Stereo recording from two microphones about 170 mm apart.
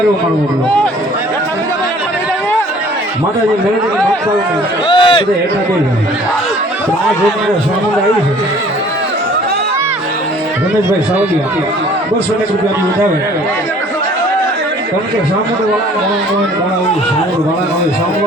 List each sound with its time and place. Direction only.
4.9 s a man's voice: 30° left (ahead or behind)